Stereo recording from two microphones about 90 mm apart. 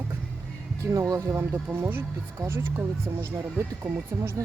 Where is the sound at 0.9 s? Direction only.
35° right (ahead or behind).